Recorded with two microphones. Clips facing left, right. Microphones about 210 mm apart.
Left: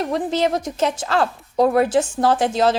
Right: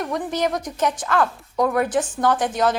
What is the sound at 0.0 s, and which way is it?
A woman's voice, 25° left (ahead or behind).